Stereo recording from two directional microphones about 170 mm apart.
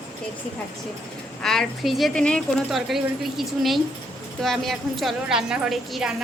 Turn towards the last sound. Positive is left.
turn(degrees=0)  # may be behind; listen again after turning